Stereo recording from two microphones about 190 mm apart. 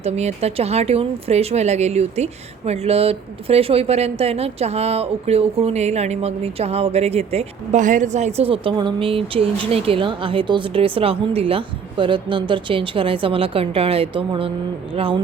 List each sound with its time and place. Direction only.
0.0 s speech: 35° right (ahead or behind)